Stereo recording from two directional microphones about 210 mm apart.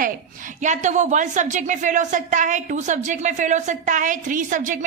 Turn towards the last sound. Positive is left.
turn(degrees=-40)  # may be behind; listen again after turning